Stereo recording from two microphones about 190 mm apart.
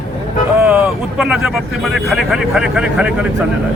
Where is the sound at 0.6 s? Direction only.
5° right (ahead or behind).